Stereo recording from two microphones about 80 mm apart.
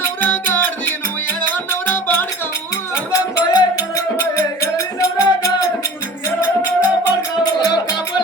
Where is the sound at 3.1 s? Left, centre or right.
Left.